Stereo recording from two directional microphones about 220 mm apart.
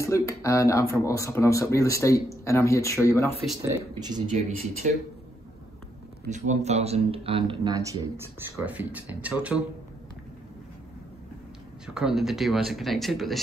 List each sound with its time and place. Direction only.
0.0 s speech: 15° left (ahead or behind)
4.3 s speech: 35° right (ahead or behind)
6.2 s speech: 35° right (ahead or behind); by 9.6 s 5° right (ahead or behind)
11.8 s speech: 5° right (ahead or behind)